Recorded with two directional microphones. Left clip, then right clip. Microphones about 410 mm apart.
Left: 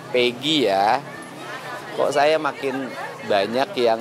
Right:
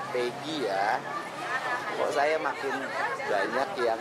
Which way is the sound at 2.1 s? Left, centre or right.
Left.